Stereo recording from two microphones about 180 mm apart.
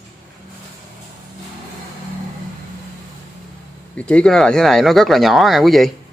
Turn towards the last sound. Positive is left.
turn(degrees=0)  # may be behind; listen again after turning